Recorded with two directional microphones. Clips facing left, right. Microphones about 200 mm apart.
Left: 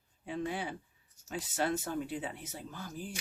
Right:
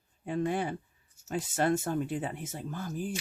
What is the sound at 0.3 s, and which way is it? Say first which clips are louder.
Speech: right 6 dB; 50° right (ahead or behind).